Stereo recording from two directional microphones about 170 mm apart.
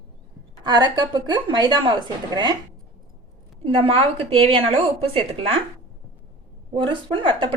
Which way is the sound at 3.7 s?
35° right (ahead or behind).